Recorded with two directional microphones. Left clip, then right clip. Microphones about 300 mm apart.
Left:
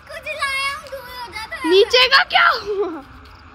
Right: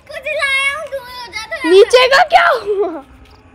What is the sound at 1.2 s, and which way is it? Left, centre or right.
Speech, centre.